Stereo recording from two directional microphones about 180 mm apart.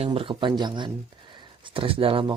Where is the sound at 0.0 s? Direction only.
30° right (ahead or behind).